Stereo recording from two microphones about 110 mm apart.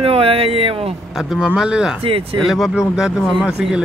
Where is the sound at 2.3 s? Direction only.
Centre (ahead or behind).